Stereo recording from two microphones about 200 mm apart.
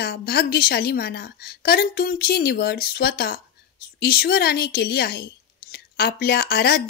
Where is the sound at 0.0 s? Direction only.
50° left (ahead or behind).